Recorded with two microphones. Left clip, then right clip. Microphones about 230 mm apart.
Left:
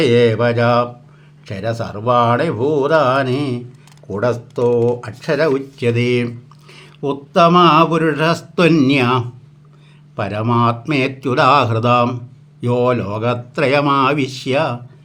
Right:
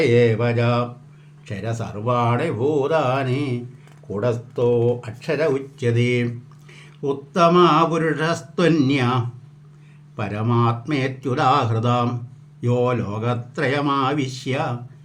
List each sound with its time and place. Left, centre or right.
0.0 s speech: left